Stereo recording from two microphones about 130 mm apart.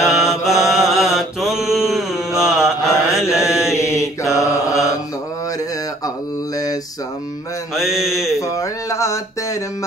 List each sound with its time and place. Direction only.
0.0 s mantra: centre (ahead or behind)
3.3 s mantra: 20° left (ahead or behind)
6.0 s mantra: 30° left (ahead or behind)
7.7 s mantra: centre (ahead or behind)
8.4 s a sound: 25° left (ahead or behind)